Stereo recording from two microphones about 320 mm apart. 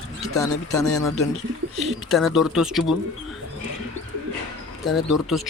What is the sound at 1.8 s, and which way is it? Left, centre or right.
Speech, centre.